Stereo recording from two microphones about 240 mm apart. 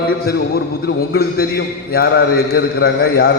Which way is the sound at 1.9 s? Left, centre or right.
Left.